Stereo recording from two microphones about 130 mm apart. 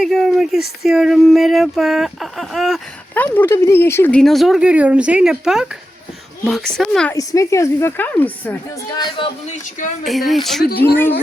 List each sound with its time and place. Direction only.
0.0 s speech: centre (ahead or behind)
3.2 s speech: 15° left (ahead or behind)
4.1 s speech: centre (ahead or behind)
7.1 s speech: 25° left (ahead or behind)
9.0 s speech: 40° left (ahead or behind)
9.5 s speech: 75° left (ahead or behind)
10.1 s speech: centre (ahead or behind)
10.8 s speech: 15° left (ahead or behind)